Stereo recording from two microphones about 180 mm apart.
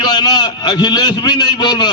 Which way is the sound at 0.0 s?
25° left (ahead or behind).